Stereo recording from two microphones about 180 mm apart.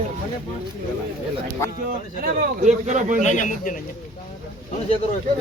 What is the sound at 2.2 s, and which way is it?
A man's voice, 45° right (ahead or behind).